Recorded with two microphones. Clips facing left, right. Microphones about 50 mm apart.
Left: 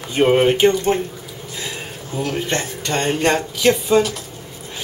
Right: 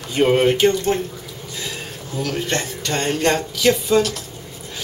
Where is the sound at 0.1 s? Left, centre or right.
Centre.